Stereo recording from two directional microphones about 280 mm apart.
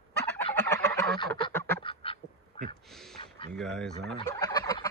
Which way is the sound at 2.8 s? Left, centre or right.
Centre.